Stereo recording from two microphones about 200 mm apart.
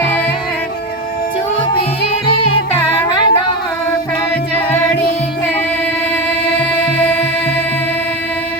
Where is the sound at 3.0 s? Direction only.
20° left (ahead or behind).